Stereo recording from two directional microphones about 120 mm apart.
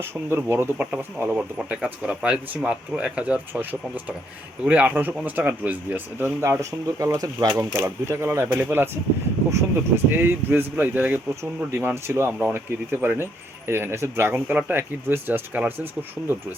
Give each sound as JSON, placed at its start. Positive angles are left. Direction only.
{"t": 0.0, "sound": "speech", "side_deg": -20}